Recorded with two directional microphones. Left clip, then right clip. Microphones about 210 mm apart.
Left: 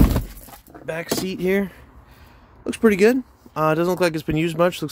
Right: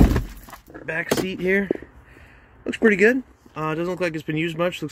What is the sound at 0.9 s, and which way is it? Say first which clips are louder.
Speech: right 2 dB; 15° left (ahead or behind).